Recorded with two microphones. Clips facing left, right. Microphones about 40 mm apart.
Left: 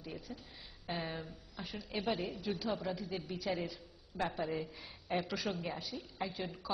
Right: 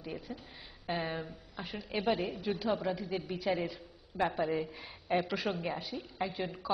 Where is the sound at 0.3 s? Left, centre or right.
Centre.